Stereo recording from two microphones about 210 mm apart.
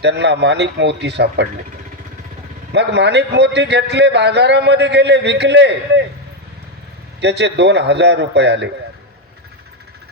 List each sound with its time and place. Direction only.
0.0 s a man's voice: 55° right (ahead or behind)
2.7 s a man's voice: 55° right (ahead or behind)
7.2 s a man's voice: 55° right (ahead or behind)